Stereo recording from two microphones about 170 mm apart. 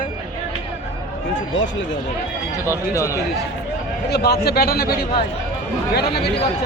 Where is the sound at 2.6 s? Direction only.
15° left (ahead or behind).